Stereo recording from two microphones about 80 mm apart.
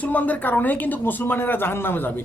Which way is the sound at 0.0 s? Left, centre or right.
Centre.